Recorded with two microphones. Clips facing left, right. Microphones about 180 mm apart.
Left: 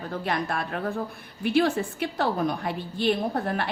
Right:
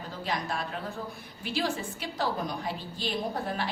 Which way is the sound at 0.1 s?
60° left (ahead or behind).